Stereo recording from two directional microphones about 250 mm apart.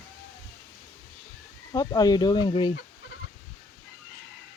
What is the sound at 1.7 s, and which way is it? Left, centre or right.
Speech, centre.